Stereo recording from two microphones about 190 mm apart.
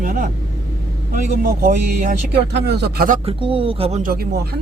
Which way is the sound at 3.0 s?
40° right (ahead or behind).